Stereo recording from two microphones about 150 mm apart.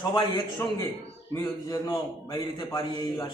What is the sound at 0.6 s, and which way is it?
A man's voice, 20° left (ahead or behind).